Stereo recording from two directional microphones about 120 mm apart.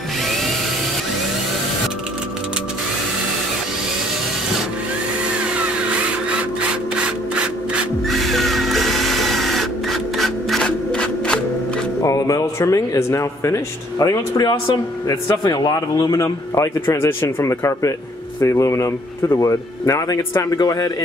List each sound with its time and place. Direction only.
0.3 s tools: centre (ahead or behind)
6.7 s rub: 10° right (ahead or behind)
8.1 s music: centre (ahead or behind)
12.0 s speech: 30° left (ahead or behind)